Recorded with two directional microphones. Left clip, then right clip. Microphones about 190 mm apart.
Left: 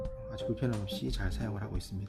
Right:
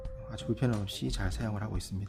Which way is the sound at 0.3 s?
30° right (ahead or behind).